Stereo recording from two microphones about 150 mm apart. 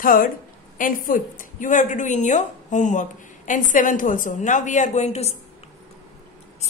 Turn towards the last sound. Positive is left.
turn(degrees=45)  # may be behind; listen again after turning